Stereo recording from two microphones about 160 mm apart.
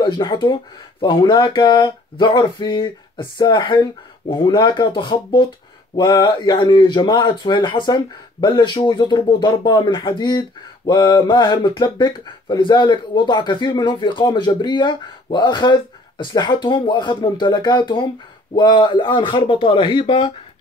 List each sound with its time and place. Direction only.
0.0 s speech: 30° left (ahead or behind)